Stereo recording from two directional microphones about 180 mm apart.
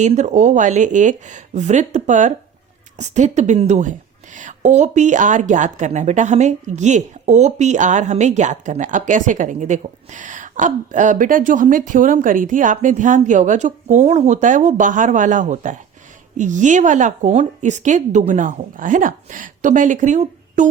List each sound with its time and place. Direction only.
0.0 s speech: 40° right (ahead or behind)